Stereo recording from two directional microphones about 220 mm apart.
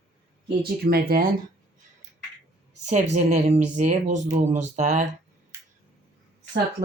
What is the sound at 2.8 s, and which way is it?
Speech, 30° right (ahead or behind).